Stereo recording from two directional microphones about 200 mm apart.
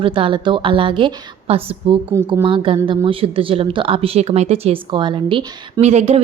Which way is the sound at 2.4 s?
25° right (ahead or behind).